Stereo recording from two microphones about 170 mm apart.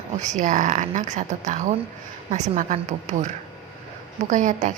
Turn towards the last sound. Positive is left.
turn(degrees=-45)  # may be behind; listen again after turning